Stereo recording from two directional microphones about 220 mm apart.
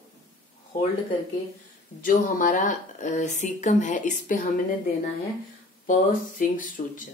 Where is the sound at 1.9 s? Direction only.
40° left (ahead or behind).